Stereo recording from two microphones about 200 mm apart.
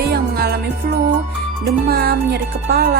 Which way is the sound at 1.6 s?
50° right (ahead or behind).